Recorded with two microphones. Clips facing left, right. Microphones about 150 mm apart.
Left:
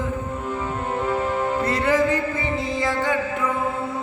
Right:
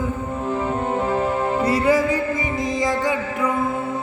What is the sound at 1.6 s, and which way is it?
Music, 10° right (ahead or behind).